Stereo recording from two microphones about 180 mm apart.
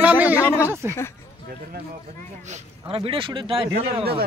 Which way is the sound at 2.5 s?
30° right (ahead or behind).